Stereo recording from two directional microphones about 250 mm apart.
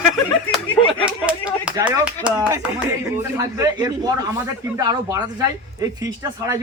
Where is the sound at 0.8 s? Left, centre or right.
Left.